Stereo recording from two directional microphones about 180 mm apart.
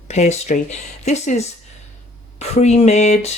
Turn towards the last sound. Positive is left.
turn(degrees=35)  # may be behind; listen again after turning